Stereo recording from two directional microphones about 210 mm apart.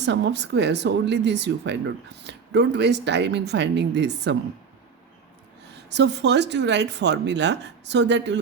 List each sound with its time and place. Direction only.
0.0 s speech: 55° right (ahead or behind)
5.9 s speech: 55° right (ahead or behind)